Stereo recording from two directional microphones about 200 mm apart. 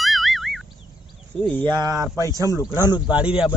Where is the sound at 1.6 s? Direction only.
20° right (ahead or behind).